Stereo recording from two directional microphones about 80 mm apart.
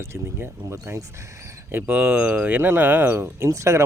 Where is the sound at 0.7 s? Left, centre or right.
Right.